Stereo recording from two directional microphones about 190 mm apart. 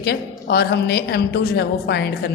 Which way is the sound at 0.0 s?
60° left (ahead or behind).